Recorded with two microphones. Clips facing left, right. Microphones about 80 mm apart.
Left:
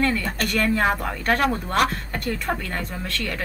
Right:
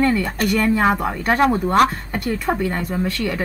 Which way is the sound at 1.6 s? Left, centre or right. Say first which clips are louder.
Right 6 dB; right.